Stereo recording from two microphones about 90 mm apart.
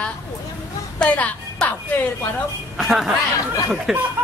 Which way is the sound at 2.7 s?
5° right (ahead or behind).